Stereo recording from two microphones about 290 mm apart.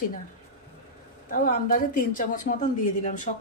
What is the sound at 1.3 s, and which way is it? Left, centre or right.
A woman's voice, left.